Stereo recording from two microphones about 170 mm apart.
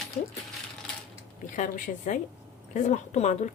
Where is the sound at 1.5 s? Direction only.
50° left (ahead or behind).